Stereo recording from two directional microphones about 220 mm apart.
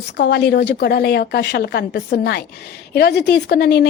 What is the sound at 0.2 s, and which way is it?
A woman's voice, 50° left (ahead or behind).